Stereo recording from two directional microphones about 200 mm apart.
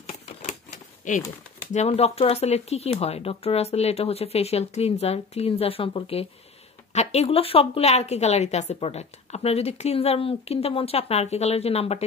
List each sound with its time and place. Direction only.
0.0 s typewriter: 35° left (ahead or behind)
1.6 s a woman's voice: 35° left (ahead or behind)